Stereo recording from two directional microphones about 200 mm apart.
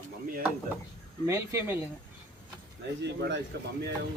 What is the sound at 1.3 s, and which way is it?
Speech, 15° right (ahead or behind).